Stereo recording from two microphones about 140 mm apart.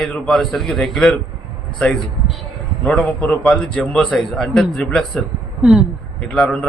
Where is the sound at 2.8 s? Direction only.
5° left (ahead or behind).